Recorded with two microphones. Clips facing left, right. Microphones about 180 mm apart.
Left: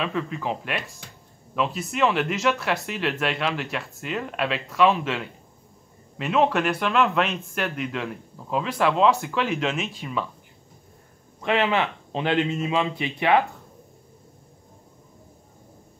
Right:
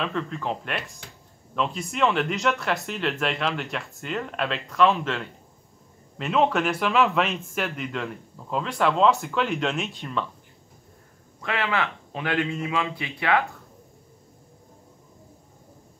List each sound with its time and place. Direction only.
0.0 s speech: 5° left (ahead or behind)
11.4 s a man's voice: 20° left (ahead or behind)